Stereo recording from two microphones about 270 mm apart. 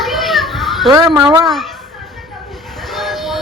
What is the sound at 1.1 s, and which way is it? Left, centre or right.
Speech, centre.